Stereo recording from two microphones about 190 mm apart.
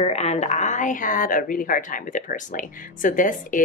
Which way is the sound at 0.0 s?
35° left (ahead or behind).